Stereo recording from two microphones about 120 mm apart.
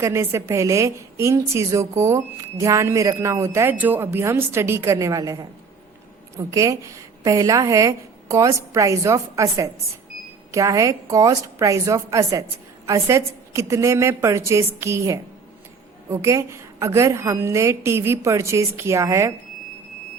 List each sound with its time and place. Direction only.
0.0 s a woman's voice: 20° right (ahead or behind)